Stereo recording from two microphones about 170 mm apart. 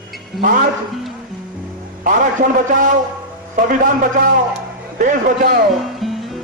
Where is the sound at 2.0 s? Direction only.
50° right (ahead or behind).